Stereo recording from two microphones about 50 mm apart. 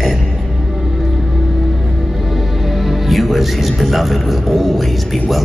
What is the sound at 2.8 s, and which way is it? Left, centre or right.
A man's voice, centre.